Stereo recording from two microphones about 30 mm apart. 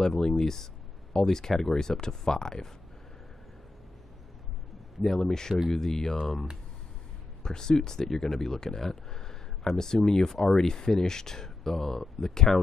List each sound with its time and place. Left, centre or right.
0.0 s speech: centre
5.0 s speech: centre
7.4 s speech: left
8.8 s a sound: centre
10.0 s speech: left